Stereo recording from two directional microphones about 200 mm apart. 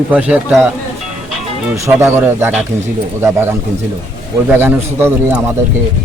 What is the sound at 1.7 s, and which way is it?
A man's voice, 10° right (ahead or behind).